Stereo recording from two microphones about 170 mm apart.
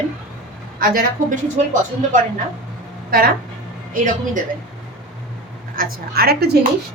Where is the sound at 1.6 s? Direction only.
40° right (ahead or behind).